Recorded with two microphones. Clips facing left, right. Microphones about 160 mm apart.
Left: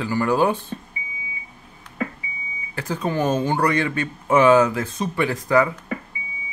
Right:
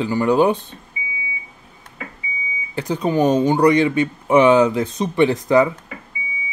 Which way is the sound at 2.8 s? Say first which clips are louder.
Right 5 dB; 15° right (ahead or behind).